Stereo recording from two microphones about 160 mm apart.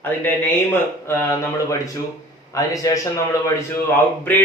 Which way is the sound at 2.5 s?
20° left (ahead or behind).